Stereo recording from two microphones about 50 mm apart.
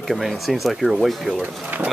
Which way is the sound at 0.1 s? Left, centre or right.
Centre.